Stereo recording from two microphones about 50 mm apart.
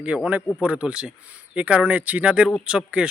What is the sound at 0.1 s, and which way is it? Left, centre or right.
A man's voice, centre.